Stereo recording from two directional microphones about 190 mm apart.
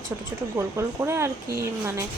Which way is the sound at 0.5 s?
15° right (ahead or behind).